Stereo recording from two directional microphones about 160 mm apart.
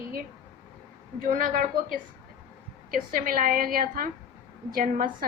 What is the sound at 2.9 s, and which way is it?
A woman's voice, 60° right (ahead or behind).